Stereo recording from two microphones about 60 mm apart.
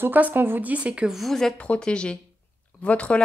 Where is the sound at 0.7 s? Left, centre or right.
Right.